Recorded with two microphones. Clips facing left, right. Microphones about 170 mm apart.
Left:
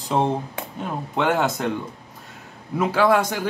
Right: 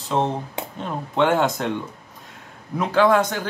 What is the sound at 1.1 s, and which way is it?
Speech, centre (ahead or behind).